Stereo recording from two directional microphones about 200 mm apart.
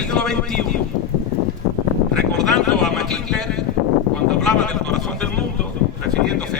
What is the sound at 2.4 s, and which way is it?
Speech, centre (ahead or behind).